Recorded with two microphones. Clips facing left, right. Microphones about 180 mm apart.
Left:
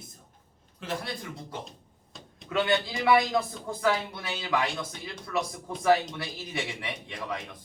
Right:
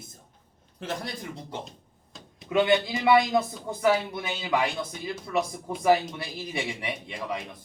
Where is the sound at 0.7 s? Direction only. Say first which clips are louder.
Right 1 dB; 40° right (ahead or behind).